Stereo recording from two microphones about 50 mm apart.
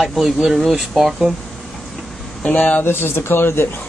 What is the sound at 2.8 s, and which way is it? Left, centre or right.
Speech, left.